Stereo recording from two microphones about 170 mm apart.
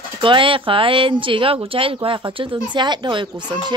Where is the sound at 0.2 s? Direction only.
30° right (ahead or behind).